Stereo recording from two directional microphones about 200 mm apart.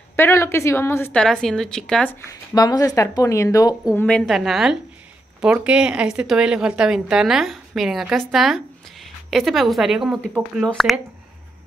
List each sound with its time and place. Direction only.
0.1 s speech: 15° left (ahead or behind)
2.2 s a woman's voice: 20° left (ahead or behind); by 11.0 s centre (ahead or behind)